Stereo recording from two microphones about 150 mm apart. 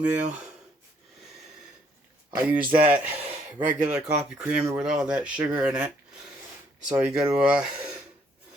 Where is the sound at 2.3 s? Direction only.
10° right (ahead or behind).